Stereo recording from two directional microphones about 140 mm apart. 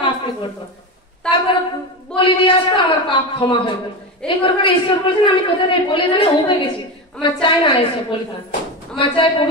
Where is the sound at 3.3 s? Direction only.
35° left (ahead or behind).